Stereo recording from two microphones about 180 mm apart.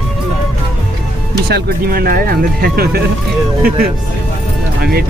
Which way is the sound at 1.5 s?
55° right (ahead or behind).